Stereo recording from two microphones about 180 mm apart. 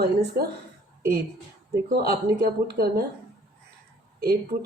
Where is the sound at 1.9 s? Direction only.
55° right (ahead or behind).